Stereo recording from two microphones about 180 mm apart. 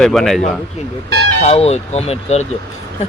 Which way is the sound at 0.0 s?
Centre (ahead or behind).